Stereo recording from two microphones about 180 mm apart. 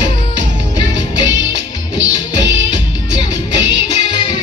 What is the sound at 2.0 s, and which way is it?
Music, 80° right.